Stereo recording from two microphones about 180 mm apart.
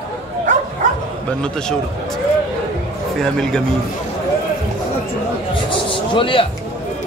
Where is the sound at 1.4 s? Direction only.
5° left (ahead or behind).